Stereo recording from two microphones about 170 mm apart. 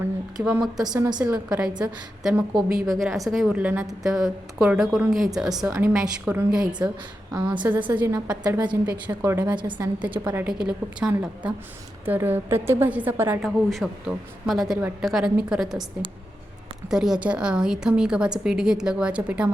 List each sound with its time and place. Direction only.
0.3 s a woman's voice: 5° right (ahead or behind)
0.9 s a woman's voice: 20° right (ahead or behind)
1.5 s a woman's voice: 5° right (ahead or behind)
7.3 s a woman's voice: 25° right (ahead or behind)
7.9 s a woman's voice: 10° right (ahead or behind)
13.4 s a woman's voice: centre (ahead or behind)